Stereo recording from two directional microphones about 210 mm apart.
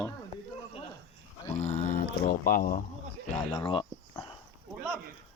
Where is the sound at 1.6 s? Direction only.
35° left (ahead or behind).